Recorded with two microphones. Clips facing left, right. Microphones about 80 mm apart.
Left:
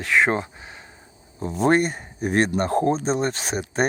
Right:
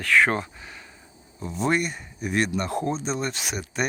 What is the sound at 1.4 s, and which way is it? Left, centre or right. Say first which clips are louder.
Speech: left 5 dB; left.